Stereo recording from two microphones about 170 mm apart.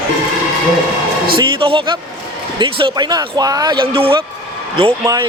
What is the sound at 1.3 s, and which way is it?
Speech, 30° right (ahead or behind).